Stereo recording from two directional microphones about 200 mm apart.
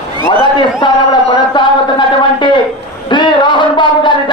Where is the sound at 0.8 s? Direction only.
25° left (ahead or behind).